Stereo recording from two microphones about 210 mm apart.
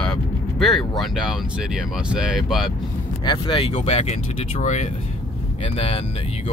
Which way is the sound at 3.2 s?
25° left (ahead or behind).